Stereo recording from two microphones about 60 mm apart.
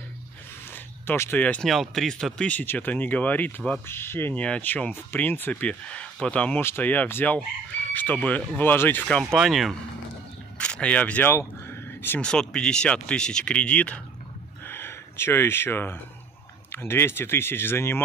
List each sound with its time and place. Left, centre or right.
0.7 s a sound: left
1.6 s speech: centre
2.6 s speech: left
3.8 s speech: left
4.4 s speech: left
4.9 s speech: left; by 6.5 s centre
6.5 s speech: left
6.8 s speech: left
9.2 s speech: centre
10.6 s speech: centre
11.2 s a sound: left
12.2 s speech: centre
14.6 s gasp: left
16.7 s speech: left